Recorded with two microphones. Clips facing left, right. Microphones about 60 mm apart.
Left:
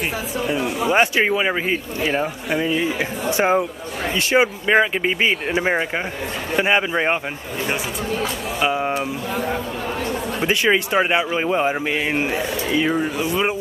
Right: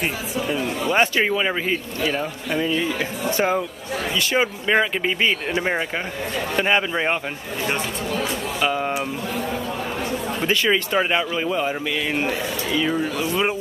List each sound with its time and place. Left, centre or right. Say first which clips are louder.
0.5 s speech: left 3 dB; centre
2.0 s speech: left 3 dB; left
2.5 s speech: left 1 dB; centre
8.5 s speech: left 2 dB; centre
10.4 s speech: left 2 dB; centre
11.3 s speech: left 3 dB; left
13.2 s speech: left 1 dB; centre